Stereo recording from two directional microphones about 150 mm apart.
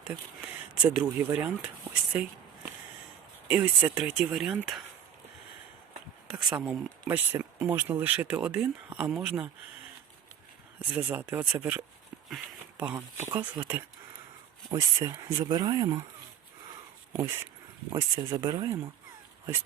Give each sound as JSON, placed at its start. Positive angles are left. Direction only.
{"t": 0.4, "sound": "speech", "side_deg": -10}
{"t": 3.5, "sound": "speech", "side_deg": -10}
{"t": 6.2, "sound": "speech", "side_deg": -5}
{"t": 10.8, "sound": "speech", "side_deg": -10}
{"t": 14.7, "sound": "speech", "side_deg": -20}
{"t": 17.2, "sound": "speech", "side_deg": -20}